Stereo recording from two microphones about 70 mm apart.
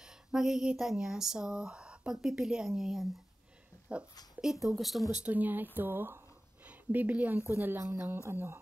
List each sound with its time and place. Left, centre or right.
0.0 s speech: centre
3.9 s speech: centre
4.6 s speech: centre
5.3 s speech: right
5.8 s a sound: right
6.7 s a woman's voice: right